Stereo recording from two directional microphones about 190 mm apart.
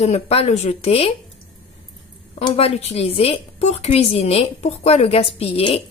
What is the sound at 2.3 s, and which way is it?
A woman's voice, 35° left (ahead or behind).